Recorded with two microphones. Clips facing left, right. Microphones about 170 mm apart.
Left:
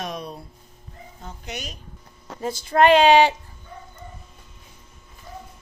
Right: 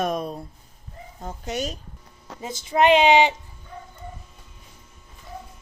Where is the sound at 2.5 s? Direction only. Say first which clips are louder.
Left 2 dB; 20° right (ahead or behind).